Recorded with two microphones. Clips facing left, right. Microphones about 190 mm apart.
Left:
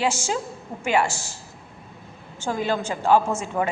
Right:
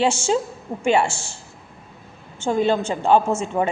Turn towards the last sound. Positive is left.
turn(degrees=-20)  # may be behind; listen again after turning